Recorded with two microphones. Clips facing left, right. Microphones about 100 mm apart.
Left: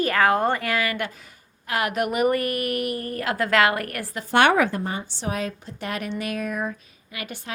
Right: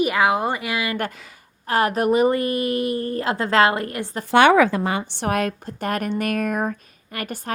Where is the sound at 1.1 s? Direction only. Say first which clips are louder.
Right 4 dB; 90° right.